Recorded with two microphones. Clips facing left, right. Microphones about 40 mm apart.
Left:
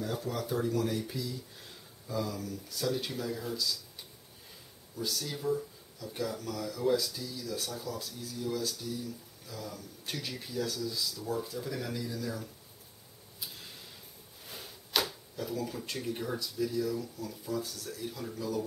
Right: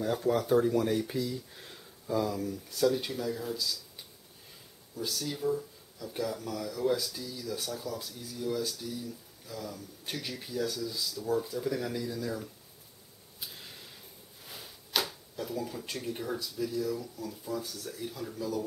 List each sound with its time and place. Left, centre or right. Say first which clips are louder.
0.0 s speech: right 6 dB; right
2.7 s speech: right 5 dB; centre
5.1 s speech: right 2 dB; centre
14.4 s a sound: left 1 dB; centre
15.9 s speech: right 1 dB; centre
18.1 s speech: right 1 dB; centre